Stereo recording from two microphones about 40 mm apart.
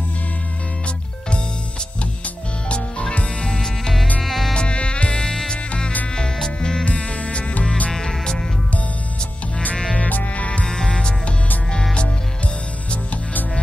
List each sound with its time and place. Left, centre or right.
2.2 s music: left
3.4 s music: centre
4.2 s insect: centre
4.6 s insect: left
5.5 s music: left
6.1 s music: centre
6.8 s music: left
7.9 s music: centre
9.9 s music: left
10.6 s music: centre
12.9 s music: left